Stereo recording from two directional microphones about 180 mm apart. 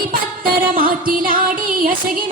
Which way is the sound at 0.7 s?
50° right (ahead or behind).